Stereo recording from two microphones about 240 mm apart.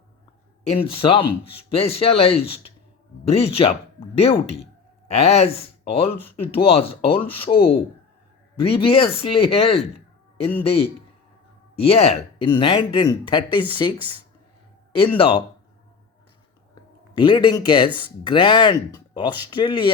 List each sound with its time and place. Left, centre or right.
0.9 s speech: left
5.0 s speech: left
17.2 s speech: centre